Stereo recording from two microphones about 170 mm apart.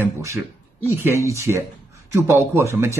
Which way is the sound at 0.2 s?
15° right (ahead or behind).